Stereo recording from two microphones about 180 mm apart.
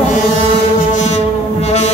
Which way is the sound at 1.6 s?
40° left (ahead or behind).